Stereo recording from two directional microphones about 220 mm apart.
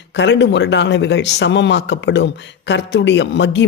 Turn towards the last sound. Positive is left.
turn(degrees=55)  # may be behind; listen again after turning